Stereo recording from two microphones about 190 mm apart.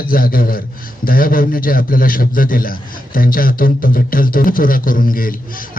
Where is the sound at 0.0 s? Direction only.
50° left (ahead or behind).